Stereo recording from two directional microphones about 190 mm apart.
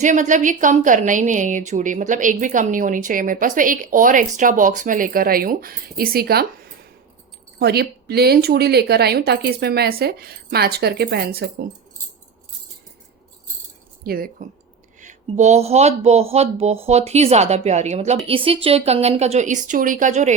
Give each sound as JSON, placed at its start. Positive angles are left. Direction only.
{"t": 0.0, "sound": "a woman's voice", "side_deg": -40}
{"t": 7.6, "sound": "a woman's voice", "side_deg": -55}
{"t": 14.0, "sound": "speech", "side_deg": -50}
{"t": 15.0, "sound": "speech", "side_deg": -35}